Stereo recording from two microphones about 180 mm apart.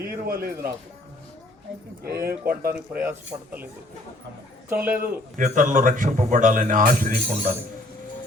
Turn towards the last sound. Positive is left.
turn(degrees=-50)  # may be behind; listen again after turning